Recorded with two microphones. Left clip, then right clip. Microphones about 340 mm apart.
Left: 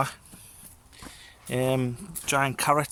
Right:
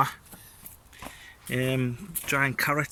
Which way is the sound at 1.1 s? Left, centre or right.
Centre.